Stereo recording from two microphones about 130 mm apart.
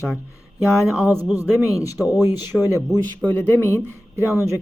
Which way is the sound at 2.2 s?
15° right (ahead or behind).